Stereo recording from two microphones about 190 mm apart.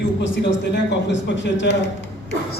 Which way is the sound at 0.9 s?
70° left (ahead or behind).